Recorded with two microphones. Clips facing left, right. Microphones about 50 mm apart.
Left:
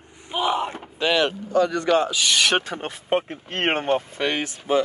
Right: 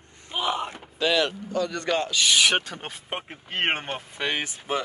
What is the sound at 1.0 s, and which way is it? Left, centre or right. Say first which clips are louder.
Speech: left 2 dB; left.